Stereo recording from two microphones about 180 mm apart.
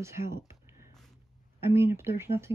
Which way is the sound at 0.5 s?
15° right (ahead or behind).